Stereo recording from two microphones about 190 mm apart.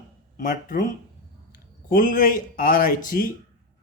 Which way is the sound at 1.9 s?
45° left (ahead or behind).